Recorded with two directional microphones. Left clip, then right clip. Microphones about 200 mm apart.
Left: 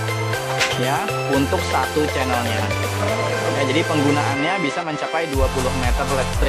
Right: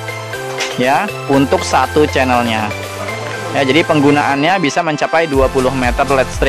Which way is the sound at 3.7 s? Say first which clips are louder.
Right 11 dB; 40° right (ahead or behind).